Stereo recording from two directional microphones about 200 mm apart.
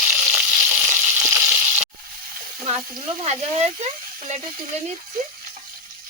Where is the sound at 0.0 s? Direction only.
5° right (ahead or behind).